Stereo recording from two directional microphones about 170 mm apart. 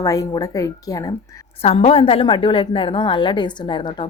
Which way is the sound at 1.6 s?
35° left (ahead or behind).